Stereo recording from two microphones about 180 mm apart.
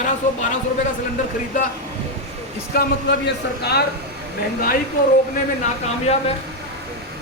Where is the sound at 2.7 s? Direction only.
65° left (ahead or behind).